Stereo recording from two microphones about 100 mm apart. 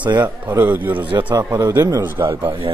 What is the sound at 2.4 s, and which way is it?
Speech, 55° right (ahead or behind).